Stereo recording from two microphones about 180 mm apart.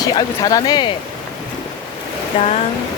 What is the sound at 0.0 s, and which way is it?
Speech, 20° left (ahead or behind).